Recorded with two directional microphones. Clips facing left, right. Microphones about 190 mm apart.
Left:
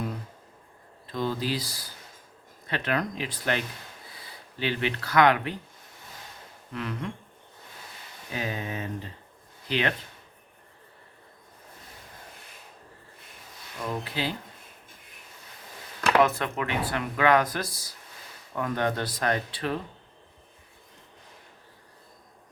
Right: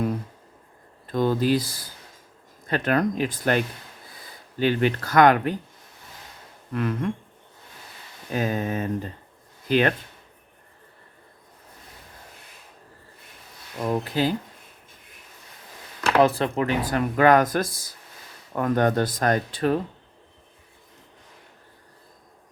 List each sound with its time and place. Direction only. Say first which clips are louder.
1.0 s speech: right 7 dB; 50° right (ahead or behind)
4.6 s speech: right 7 dB; 45° right (ahead or behind)
6.7 s speech: right 7 dB; 50° right (ahead or behind)
8.3 s speech: right 7 dB; 45° right (ahead or behind)
13.8 s speech: right 7 dB; 45° right (ahead or behind)
16.2 s speech: right 5 dB; 30° right (ahead or behind)